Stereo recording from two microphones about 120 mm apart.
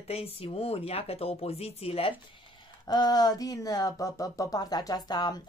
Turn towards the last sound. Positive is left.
turn(degrees=35)  # may be behind; listen again after turning